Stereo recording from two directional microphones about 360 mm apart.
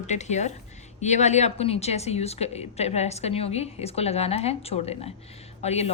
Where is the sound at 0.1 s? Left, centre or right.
Centre.